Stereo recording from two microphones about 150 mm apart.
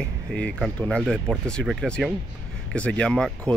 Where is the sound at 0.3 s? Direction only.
5° left (ahead or behind).